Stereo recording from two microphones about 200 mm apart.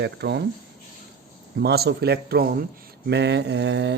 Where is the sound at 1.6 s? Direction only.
55° right (ahead or behind).